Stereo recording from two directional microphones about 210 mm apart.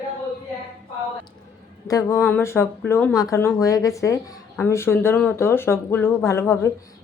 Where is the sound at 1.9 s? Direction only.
15° left (ahead or behind).